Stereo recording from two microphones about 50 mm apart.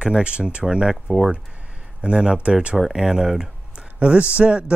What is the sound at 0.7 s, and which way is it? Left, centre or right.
Speech, centre.